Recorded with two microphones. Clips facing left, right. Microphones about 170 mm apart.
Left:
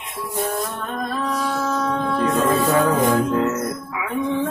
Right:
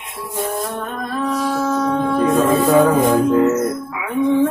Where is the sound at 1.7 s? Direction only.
20° right (ahead or behind).